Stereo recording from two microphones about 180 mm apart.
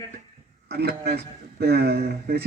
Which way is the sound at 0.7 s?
60° right (ahead or behind).